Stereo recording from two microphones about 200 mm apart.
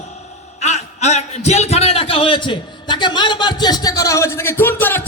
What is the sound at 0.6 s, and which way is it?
A man's voice, 35° left (ahead or behind).